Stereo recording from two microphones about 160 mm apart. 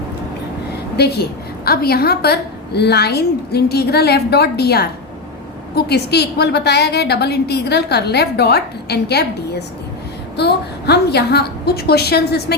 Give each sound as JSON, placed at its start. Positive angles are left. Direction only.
{"t": 0.9, "sound": "a woman's voice", "side_deg": 90}